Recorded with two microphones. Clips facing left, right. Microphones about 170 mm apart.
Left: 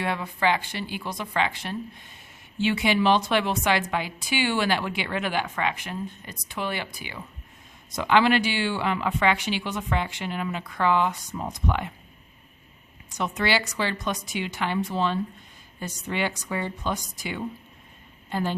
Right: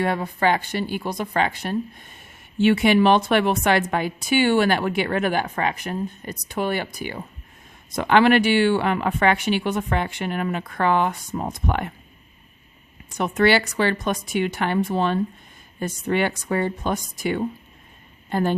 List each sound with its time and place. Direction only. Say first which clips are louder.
0.0 s speech: right 4 dB; 45° right (ahead or behind)
13.1 s a woman's voice: right 7 dB; 55° right (ahead or behind)